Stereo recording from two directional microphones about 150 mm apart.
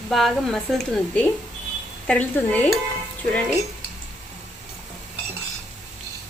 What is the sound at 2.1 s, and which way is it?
Dishes, 10° left (ahead or behind).